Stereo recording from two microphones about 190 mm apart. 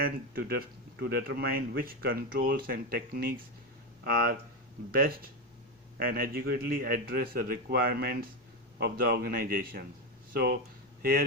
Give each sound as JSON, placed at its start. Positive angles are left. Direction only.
{"t": 0.0, "sound": "speech", "side_deg": -55}